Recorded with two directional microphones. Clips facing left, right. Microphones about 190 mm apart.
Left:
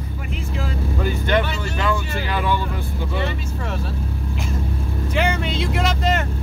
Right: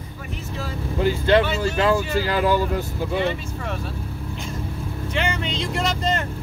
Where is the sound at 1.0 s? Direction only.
30° right (ahead or behind).